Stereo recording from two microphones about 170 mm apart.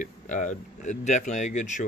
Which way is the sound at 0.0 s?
50° left (ahead or behind).